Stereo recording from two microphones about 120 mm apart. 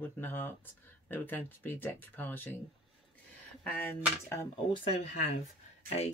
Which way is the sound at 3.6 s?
15° left (ahead or behind).